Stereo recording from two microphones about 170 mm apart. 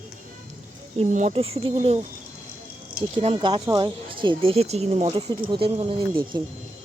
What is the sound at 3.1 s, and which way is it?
Speech, 35° right (ahead or behind).